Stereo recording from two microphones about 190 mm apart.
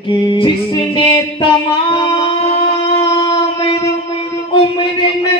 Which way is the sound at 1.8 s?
25° left (ahead or behind).